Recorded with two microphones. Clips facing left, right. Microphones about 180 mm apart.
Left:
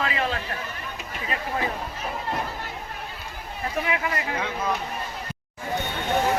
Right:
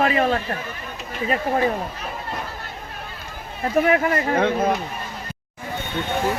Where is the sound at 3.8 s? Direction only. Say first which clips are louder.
Right 8 dB; 45° right (ahead or behind).